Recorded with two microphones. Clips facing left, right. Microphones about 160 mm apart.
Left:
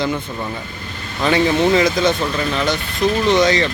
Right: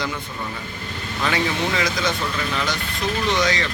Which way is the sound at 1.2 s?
25° left (ahead or behind).